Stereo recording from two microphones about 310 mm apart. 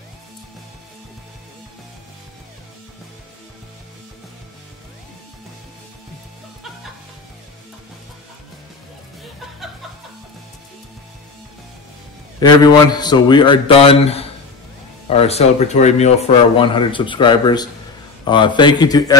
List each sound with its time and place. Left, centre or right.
12.4 s a man's voice: centre